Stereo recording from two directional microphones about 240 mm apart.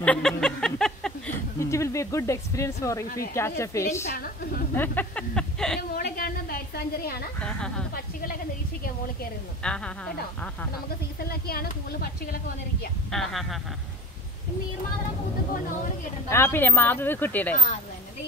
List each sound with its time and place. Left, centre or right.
0.0 s speech: centre
4.0 s a woman's voice: left
4.7 s speech: centre
5.8 s a sound: left
7.4 s a woman's voice: centre
7.9 s a woman's voice: left
9.6 s a woman's voice: centre
11.1 s a woman's voice: left
13.1 s a woman's voice: centre
16.3 s speech: centre